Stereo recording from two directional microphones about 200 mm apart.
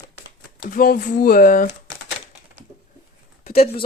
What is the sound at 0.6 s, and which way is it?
Speech, 45° left (ahead or behind).